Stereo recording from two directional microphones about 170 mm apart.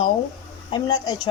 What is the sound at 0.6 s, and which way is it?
Female singing, 25° left (ahead or behind).